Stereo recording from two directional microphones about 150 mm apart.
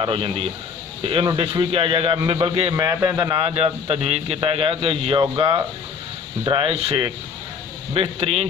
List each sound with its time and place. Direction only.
0.0 s a man's voice: 35° right (ahead or behind)
2.7 s a man's voice: 15° right (ahead or behind)
3.2 s a man's voice: 25° right (ahead or behind)
3.4 s a man's voice: 40° right (ahead or behind)